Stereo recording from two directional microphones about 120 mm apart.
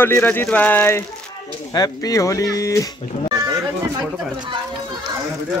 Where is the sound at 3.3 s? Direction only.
30° right (ahead or behind).